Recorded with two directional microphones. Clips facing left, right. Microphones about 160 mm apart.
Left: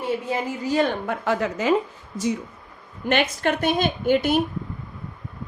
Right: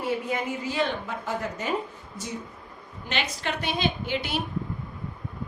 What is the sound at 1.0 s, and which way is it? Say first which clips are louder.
Speech: left 7 dB; 65° left (ahead or behind).